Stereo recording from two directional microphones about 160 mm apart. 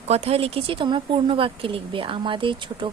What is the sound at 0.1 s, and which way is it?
A woman's voice, 40° right (ahead or behind).